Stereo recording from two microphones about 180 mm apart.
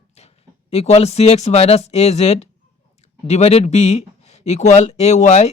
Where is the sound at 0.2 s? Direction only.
35° left (ahead or behind).